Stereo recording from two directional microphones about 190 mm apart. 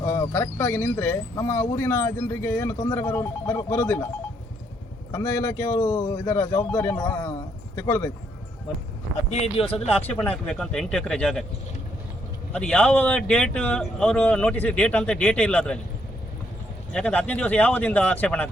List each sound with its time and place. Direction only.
0.0 s speech: 10° left (ahead or behind)
5.1 s speech: 15° left (ahead or behind)
9.3 s speech: 30° left (ahead or behind)
10.2 s a man's voice: 5° left (ahead or behind)
12.5 s a man's voice: 5° left (ahead or behind)
16.9 s speech: 5° left (ahead or behind)